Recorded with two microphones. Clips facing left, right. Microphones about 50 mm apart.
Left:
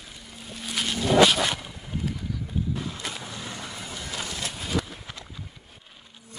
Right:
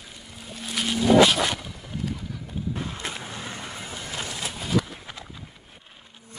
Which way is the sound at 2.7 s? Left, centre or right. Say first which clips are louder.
Even; right.